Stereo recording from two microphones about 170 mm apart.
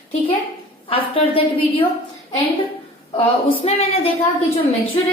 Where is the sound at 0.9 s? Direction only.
35° left (ahead or behind).